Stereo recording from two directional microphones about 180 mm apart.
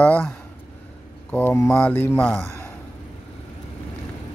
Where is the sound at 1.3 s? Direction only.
15° left (ahead or behind).